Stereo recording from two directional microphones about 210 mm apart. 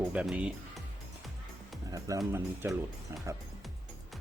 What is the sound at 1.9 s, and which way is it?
Speech, 15° right (ahead or behind).